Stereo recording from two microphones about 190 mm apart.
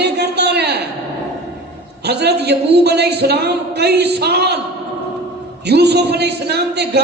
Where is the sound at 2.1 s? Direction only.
60° right (ahead or behind).